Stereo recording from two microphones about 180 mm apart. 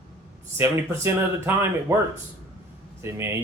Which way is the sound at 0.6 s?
15° right (ahead or behind).